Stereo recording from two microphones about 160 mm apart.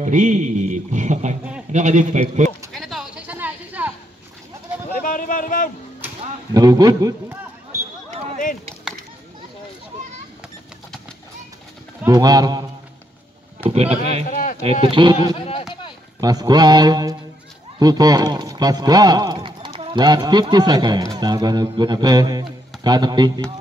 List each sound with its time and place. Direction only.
0.0 s a man's voice: 50° right (ahead or behind)
2.7 s a sound: centre (ahead or behind)
5.0 s speech: 55° left (ahead or behind)
6.5 s speech: 25° right (ahead or behind)
12.1 s speech: 25° right (ahead or behind)
13.7 s speech: 40° right (ahead or behind)
14.3 s a sound: 55° left (ahead or behind)
14.6 s speech: 35° right (ahead or behind)
15.3 s a sound: 35° left (ahead or behind)
16.2 s speech: 25° right (ahead or behind)